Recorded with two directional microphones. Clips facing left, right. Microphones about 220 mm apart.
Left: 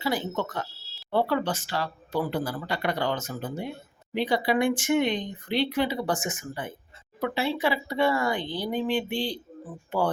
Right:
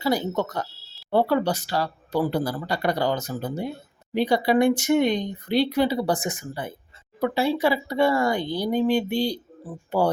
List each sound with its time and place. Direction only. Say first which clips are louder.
0.0 s speech: right 4 dB; 40° right (ahead or behind)